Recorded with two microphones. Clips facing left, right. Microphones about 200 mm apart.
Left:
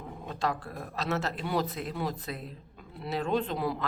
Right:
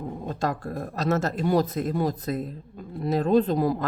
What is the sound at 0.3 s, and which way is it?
Speech, 45° right (ahead or behind).